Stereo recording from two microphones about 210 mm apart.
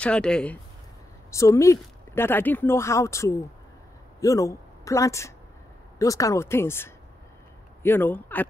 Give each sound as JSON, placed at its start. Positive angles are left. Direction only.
{"t": 0.0, "sound": "speech", "side_deg": 5}